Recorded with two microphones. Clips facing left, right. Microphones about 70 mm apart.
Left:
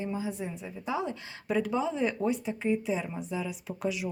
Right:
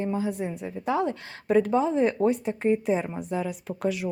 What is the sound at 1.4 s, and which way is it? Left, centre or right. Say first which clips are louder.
A woman's voice: right 7 dB; right.